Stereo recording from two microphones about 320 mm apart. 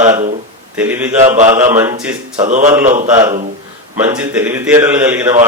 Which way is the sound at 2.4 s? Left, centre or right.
Right.